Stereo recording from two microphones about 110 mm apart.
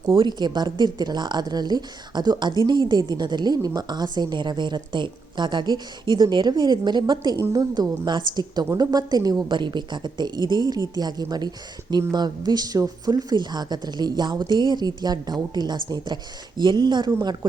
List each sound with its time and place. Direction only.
0.1 s speech: 45° right (ahead or behind)
17.1 s speech: 30° right (ahead or behind)